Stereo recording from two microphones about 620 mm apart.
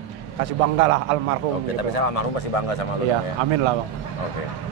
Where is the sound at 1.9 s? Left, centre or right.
Left.